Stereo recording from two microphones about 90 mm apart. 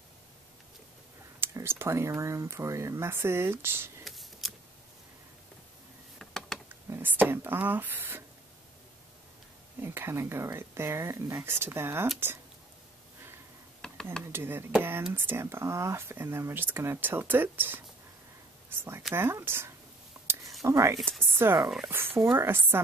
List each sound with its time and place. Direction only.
1.4 s speech: 25° right (ahead or behind)
4.0 s scissors: centre (ahead or behind)
6.1 s a sound: 5° left (ahead or behind)
6.7 s speech: 20° right (ahead or behind)
9.8 s speech: 25° right (ahead or behind)
13.7 s a sound: 5° left (ahead or behind)
14.3 s speech: 25° right (ahead or behind)